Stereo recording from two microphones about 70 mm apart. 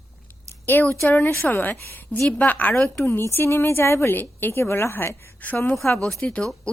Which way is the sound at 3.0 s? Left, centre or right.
Left.